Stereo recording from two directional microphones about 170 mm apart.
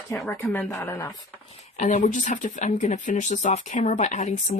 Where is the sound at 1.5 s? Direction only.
45° left (ahead or behind).